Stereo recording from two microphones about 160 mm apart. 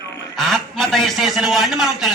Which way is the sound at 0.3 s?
Centre (ahead or behind).